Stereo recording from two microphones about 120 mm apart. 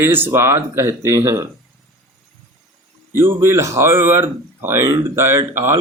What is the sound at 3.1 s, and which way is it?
Speech, 20° right (ahead or behind).